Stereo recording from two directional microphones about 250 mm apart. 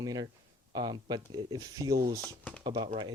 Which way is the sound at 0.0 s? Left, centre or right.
Centre.